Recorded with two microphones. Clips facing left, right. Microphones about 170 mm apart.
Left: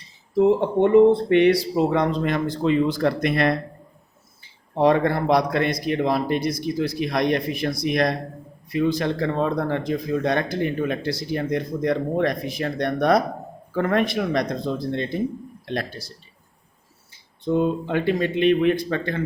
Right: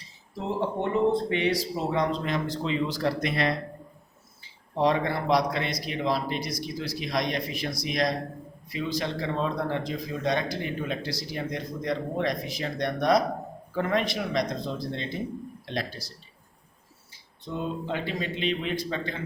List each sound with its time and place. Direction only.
0.3 s speech: 60° left (ahead or behind)
4.7 s speech: 55° left (ahead or behind)
17.4 s speech: 55° left (ahead or behind)